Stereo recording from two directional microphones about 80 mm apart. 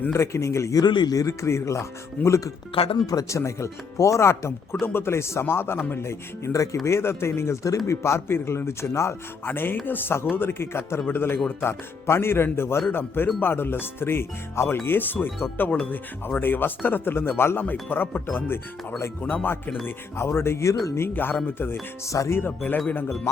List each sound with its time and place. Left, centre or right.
0.1 s speech: left
0.8 s speech: left
1.1 s speech: left
2.7 s speech: left
3.1 s speech: left
19.2 s speech: centre
19.8 s speech: left
22.1 s speech: left
22.4 s speech: left